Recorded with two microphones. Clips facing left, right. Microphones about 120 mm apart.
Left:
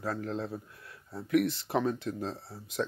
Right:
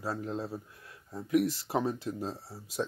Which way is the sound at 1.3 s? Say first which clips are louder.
Left 1 dB; 35° right (ahead or behind).